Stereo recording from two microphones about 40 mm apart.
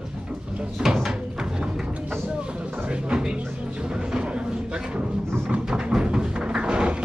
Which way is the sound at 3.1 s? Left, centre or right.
Right.